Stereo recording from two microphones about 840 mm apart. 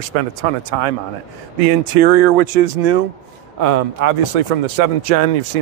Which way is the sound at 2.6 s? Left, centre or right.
Right.